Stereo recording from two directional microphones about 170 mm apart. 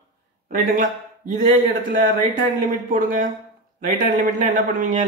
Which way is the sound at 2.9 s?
50° right (ahead or behind).